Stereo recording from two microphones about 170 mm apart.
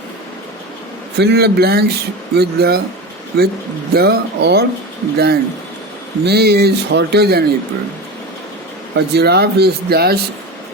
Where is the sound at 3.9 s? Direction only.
65° right (ahead or behind).